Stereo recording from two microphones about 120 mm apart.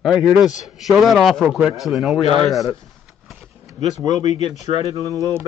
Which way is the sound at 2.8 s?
Centre (ahead or behind).